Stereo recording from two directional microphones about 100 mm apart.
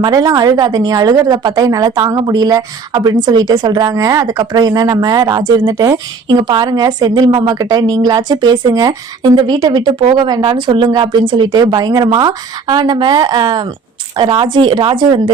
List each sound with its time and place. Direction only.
0.0 s a woman's voice: 40° right (ahead or behind)